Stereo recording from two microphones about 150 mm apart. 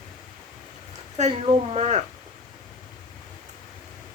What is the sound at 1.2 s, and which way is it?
Speech, 45° right (ahead or behind).